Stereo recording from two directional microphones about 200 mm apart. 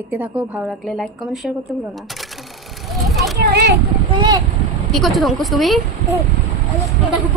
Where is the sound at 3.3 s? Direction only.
55° right (ahead or behind).